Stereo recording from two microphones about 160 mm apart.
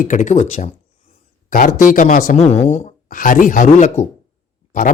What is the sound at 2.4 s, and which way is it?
Speech, 45° left (ahead or behind).